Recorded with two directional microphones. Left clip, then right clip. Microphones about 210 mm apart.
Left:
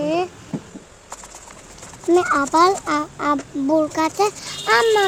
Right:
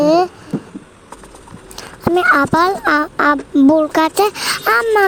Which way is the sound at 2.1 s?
50° right (ahead or behind).